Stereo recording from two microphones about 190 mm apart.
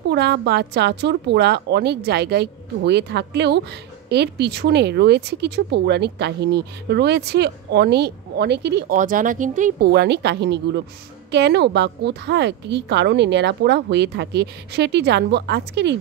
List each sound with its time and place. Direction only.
0.1 s speech: 60° right (ahead or behind)
8.9 s speech: 45° right (ahead or behind)
9.8 s speech: 60° right (ahead or behind)